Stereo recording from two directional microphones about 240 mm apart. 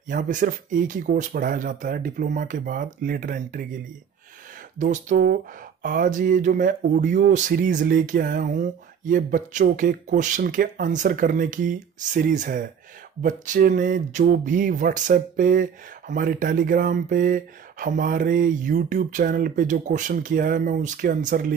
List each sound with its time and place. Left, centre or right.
0.1 s speech: right
4.7 s speech: right